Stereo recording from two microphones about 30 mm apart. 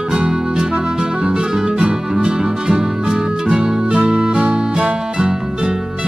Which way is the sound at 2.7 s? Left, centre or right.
Right.